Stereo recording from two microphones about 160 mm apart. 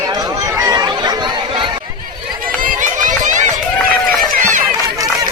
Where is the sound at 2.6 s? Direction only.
55° right (ahead or behind).